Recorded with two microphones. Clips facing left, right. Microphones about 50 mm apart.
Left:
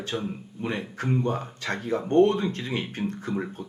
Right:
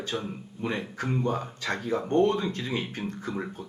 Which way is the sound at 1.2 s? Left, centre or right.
Left.